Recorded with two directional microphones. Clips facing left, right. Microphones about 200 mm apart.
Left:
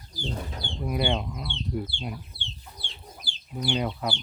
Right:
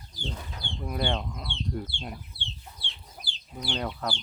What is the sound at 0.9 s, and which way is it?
Speech, 10° left (ahead or behind).